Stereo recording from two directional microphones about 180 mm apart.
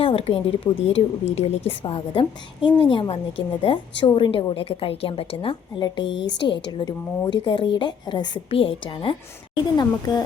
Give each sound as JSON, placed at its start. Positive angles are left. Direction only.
{"t": 0.0, "sound": "a woman's voice", "side_deg": 30}